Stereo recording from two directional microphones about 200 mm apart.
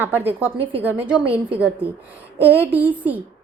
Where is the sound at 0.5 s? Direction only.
25° right (ahead or behind).